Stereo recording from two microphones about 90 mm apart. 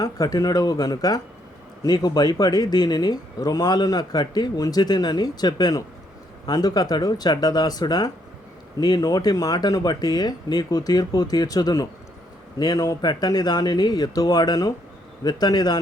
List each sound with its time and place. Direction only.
0.0 s speech: 45° left (ahead or behind)